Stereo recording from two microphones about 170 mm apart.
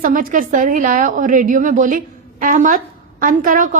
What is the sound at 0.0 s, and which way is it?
A woman's voice, 55° right (ahead or behind).